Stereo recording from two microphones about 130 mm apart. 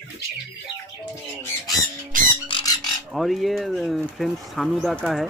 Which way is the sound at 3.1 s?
Centre (ahead or behind).